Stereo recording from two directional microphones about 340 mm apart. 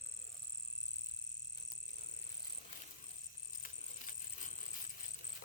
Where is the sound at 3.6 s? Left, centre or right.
Left.